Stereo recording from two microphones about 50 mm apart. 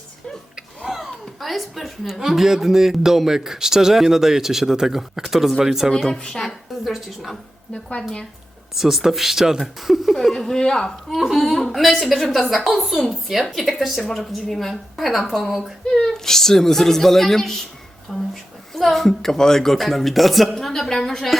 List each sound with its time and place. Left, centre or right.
0.9 s a woman's voice: centre
6.1 s a woman's voice: centre
6.8 s a woman's voice: centre
7.7 s a woman's voice: left
8.7 s a woman's voice: centre
10.3 s a woman's voice: centre
11.1 s a woman's voice: centre
15.9 s a woman's voice: centre